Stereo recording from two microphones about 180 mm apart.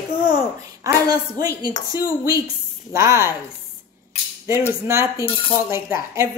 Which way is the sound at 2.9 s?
15° right (ahead or behind).